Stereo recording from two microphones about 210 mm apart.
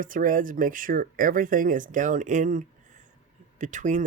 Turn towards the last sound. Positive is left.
turn(degrees=-35)  # may be behind; listen again after turning